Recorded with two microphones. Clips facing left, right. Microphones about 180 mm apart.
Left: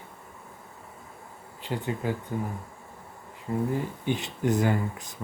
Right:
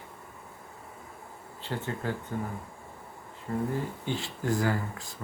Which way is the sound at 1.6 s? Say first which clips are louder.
Left 3 dB; 15° left (ahead or behind).